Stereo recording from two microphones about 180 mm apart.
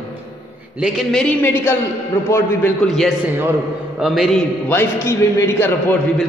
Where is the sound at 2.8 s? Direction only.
Centre (ahead or behind).